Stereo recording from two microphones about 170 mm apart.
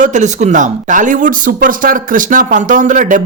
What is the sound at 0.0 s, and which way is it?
Speech, 45° right (ahead or behind).